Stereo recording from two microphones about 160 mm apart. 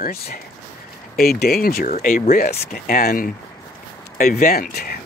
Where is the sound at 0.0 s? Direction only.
70° left (ahead or behind).